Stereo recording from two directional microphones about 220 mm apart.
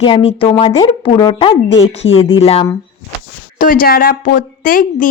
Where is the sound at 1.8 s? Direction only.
60° left (ahead or behind).